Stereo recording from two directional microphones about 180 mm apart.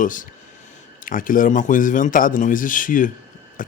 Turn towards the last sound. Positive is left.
turn(degrees=45)  # may be behind; listen again after turning